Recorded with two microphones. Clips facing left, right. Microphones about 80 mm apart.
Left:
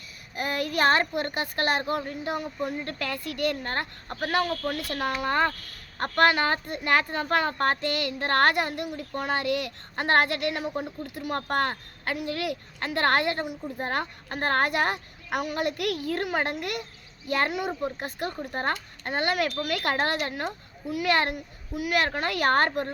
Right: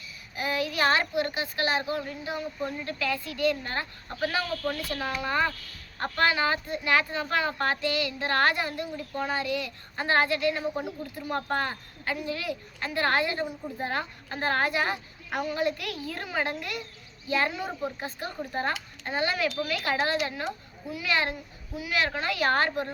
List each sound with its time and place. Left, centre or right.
0.3 s a woman's voice: left
13.7 s a woman's voice: left